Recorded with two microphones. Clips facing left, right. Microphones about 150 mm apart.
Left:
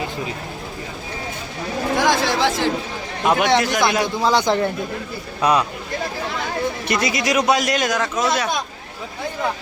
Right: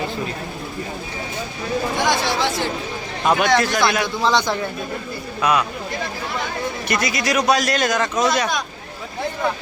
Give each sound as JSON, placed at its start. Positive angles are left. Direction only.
{"t": 2.0, "sound": "a sound", "side_deg": 90}
{"t": 3.2, "sound": "a man's voice", "side_deg": 20}
{"t": 5.4, "sound": "speech", "side_deg": 30}
{"t": 6.8, "sound": "speech", "side_deg": 25}